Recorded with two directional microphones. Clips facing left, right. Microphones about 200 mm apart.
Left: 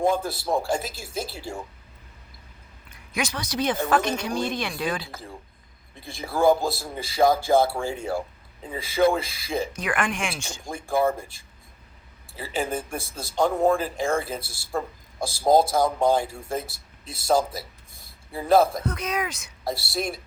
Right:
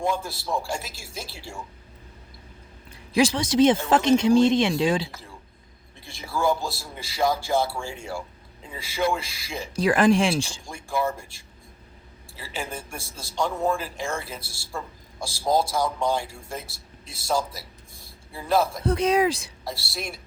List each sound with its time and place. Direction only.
0.0 s a man's voice: 55° left (ahead or behind)
2.9 s speech: 30° right (ahead or behind)
6.2 s a man's voice: 55° left (ahead or behind)
9.0 s a man's voice: 55° left (ahead or behind)
9.7 s speech: 30° right (ahead or behind)
10.7 s a man's voice: 55° left (ahead or behind)
12.7 s a man's voice: 55° left (ahead or behind)
18.8 s speech: 30° right (ahead or behind)
19.6 s a man's voice: 55° left (ahead or behind)